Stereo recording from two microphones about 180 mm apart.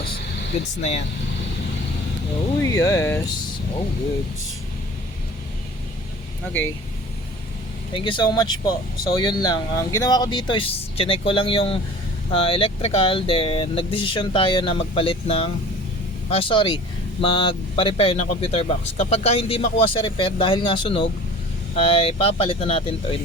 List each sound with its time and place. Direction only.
0.8 s speech: 40° left (ahead or behind)
2.6 s speech: 15° left (ahead or behind)
7.9 s speech: 30° left (ahead or behind)